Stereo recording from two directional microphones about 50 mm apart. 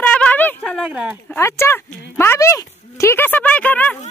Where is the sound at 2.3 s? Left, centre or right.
Left.